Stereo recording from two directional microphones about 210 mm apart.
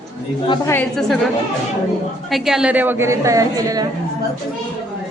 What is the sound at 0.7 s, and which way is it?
Speech, 5° left (ahead or behind).